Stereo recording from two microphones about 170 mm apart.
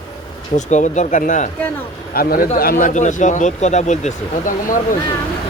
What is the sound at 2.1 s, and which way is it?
A man's voice, 60° left (ahead or behind).